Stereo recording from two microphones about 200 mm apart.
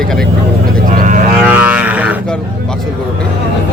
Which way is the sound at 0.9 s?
40° right (ahead or behind).